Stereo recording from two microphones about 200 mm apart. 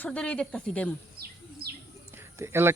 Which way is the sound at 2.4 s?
10° right (ahead or behind).